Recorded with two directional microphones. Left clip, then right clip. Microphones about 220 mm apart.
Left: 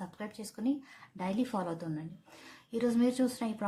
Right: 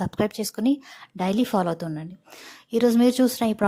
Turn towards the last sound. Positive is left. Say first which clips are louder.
# right 12 dB
turn(degrees=-40)  # may be behind; listen again after turning